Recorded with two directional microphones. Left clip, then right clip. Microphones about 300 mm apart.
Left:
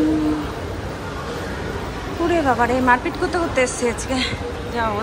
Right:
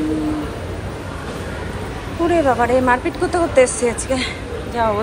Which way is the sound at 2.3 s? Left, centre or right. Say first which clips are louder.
Right 3 dB; centre.